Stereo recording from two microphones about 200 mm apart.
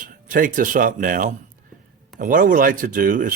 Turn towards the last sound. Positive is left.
turn(degrees=-40)  # may be behind; listen again after turning